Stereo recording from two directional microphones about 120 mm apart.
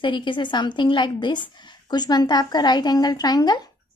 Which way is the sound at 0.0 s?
40° left (ahead or behind).